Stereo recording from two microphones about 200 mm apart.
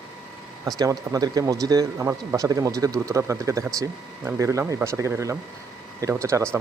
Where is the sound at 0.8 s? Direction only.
20° right (ahead or behind).